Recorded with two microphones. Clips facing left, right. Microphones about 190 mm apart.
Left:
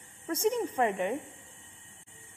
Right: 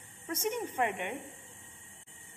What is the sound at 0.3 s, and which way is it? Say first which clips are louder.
Speech: left 6 dB; 30° left (ahead or behind).